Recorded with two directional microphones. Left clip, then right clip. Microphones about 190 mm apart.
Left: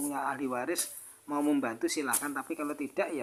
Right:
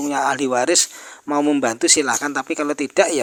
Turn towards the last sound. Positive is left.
turn(degrees=-45)  # may be behind; listen again after turning